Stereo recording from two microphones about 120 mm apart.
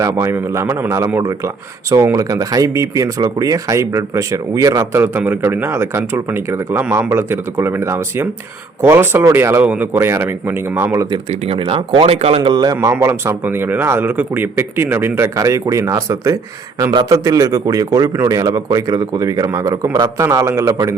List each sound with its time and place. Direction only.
0.0 s speech: 25° right (ahead or behind)
11.4 s speech: 50° right (ahead or behind)
12.4 s a man's voice: 35° right (ahead or behind)
13.0 s speech: 20° right (ahead or behind)